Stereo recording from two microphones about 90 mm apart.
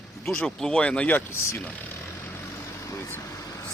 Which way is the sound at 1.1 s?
30° left (ahead or behind).